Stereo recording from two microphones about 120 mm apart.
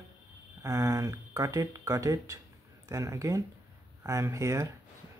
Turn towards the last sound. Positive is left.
turn(degrees=-25)  # may be behind; listen again after turning